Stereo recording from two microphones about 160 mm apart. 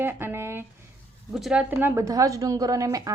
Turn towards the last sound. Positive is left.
turn(degrees=-20)  # may be behind; listen again after turning